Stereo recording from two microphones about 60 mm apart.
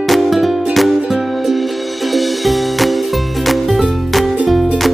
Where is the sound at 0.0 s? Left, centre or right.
Centre.